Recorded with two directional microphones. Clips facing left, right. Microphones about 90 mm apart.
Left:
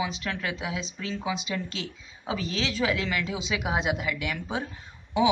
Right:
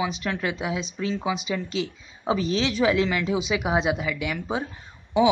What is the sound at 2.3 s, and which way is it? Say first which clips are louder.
Speech: right 6 dB; 20° right (ahead or behind).